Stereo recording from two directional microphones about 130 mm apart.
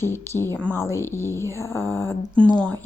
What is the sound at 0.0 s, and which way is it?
A woman's voice, 20° left (ahead or behind).